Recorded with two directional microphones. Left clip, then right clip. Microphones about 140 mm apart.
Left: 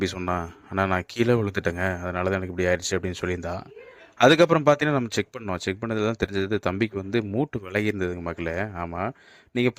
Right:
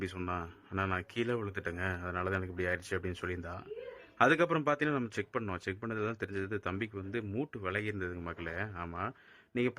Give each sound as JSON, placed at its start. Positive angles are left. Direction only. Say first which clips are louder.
{"t": 0.8, "sound": "speech", "louder": "left 11 dB", "side_deg": 50}